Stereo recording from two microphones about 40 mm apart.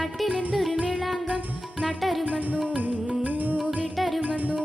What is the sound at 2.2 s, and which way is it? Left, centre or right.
Music, right.